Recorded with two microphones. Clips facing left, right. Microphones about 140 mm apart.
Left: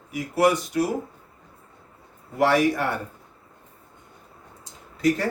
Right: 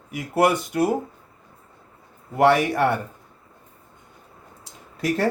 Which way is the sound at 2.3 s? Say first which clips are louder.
Right 2 dB; 60° right (ahead or behind).